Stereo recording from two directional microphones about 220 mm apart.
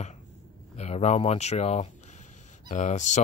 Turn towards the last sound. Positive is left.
turn(degrees=35)  # may be behind; listen again after turning